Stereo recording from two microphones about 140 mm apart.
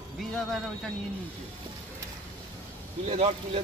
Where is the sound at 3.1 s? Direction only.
50° right (ahead or behind).